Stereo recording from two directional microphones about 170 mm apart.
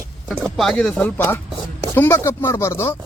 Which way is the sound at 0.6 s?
5° left (ahead or behind).